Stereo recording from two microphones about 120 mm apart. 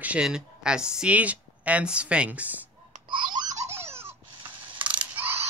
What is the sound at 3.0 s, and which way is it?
Baby laughter, 40° right (ahead or behind).